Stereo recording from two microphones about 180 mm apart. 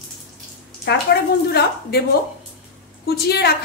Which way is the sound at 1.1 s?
65° left (ahead or behind).